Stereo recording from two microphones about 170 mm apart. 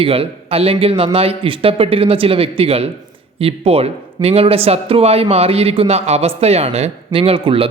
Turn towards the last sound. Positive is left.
turn(degrees=-35)  # may be behind; listen again after turning